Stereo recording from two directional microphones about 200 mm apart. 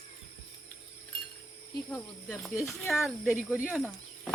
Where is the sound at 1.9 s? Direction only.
15° left (ahead or behind).